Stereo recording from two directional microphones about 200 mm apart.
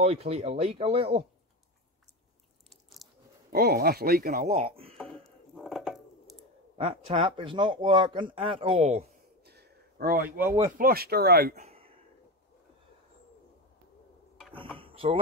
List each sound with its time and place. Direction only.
0.0 s speech: 30° right (ahead or behind)
3.0 s chewing: centre (ahead or behind)
3.5 s speech: 50° right (ahead or behind)
4.5 s speech: 30° right (ahead or behind)
4.9 s a sound: centre (ahead or behind)
6.8 s speech: 30° right (ahead or behind)
9.4 s a sound: 55° right (ahead or behind)
10.8 s speech: 50° right (ahead or behind)
11.6 s a sound: 30° right (ahead or behind)
14.5 s mechanisms: 25° right (ahead or behind)